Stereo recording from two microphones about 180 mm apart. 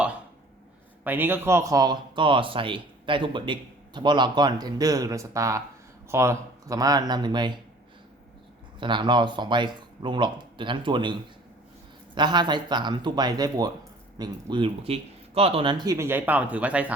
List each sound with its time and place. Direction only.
1.0 s speech: 10° right (ahead or behind)
8.8 s speech: 25° right (ahead or behind); by 16.9 s 5° right (ahead or behind)